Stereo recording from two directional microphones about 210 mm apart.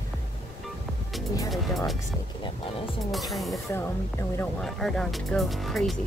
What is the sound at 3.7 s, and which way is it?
Speech, 10° left (ahead or behind).